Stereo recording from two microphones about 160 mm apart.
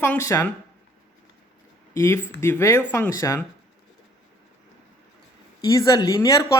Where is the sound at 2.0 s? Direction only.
15° left (ahead or behind).